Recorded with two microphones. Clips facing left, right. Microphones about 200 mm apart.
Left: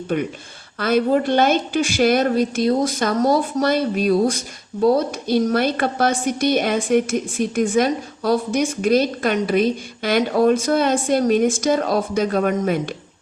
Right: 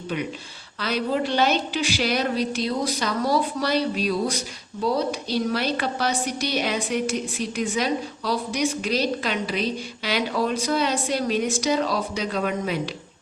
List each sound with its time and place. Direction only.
0.1 s a woman's voice: 50° left (ahead or behind)